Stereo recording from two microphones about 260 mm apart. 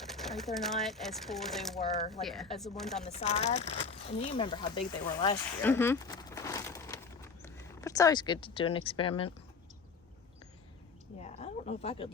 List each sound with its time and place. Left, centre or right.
0.0 s speech: centre
3.0 s speech: left
11.2 s speech: left